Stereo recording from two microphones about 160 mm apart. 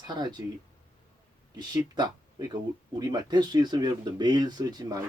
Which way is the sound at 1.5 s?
25° right (ahead or behind).